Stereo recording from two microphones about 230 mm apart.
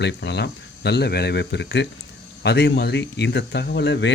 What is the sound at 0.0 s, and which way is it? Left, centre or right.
Speech, left.